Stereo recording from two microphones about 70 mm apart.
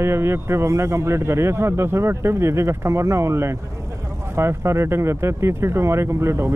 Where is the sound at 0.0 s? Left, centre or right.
Right.